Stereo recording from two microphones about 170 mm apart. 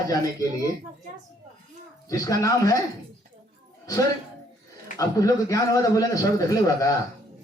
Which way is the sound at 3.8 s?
20° left (ahead or behind).